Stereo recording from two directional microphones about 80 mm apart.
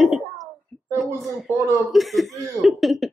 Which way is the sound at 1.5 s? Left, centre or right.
Right.